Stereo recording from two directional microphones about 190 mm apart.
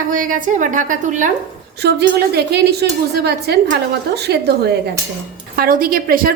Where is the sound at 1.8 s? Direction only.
60° right (ahead or behind).